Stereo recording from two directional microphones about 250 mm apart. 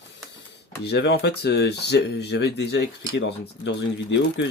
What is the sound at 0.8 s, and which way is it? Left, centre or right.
Speech, left.